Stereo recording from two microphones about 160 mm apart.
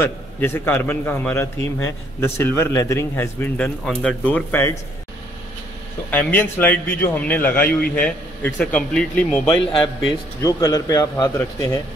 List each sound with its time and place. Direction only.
0.0 s a man's voice: 15° left (ahead or behind)
6.0 s a man's voice: 10° left (ahead or behind)
9.5 s a man's voice: 30° left (ahead or behind)